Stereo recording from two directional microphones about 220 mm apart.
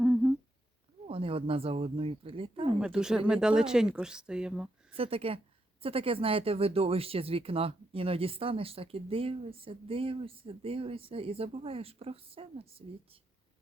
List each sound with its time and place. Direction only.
0.0 s humming: centre (ahead or behind)
1.0 s speech: 25° right (ahead or behind)
2.8 s speech: 5° right (ahead or behind)
4.9 s speech: 25° right (ahead or behind)